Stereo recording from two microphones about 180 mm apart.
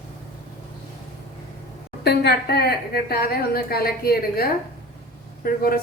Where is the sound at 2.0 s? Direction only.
65° left (ahead or behind).